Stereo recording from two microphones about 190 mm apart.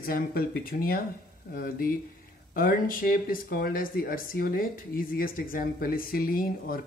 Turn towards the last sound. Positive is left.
turn(degrees=50)  # may be behind; listen again after turning